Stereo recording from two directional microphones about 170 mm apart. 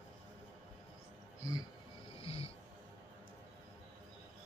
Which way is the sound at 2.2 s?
35° left (ahead or behind).